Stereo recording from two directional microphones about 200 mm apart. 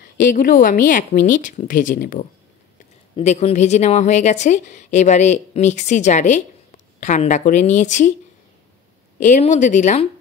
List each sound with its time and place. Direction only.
0.0 s a woman's voice: 45° left (ahead or behind)
9.2 s a woman's voice: 35° left (ahead or behind)